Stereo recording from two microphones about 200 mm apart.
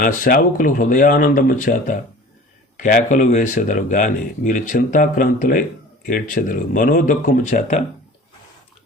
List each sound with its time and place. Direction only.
0.0 s speech: 45° left (ahead or behind)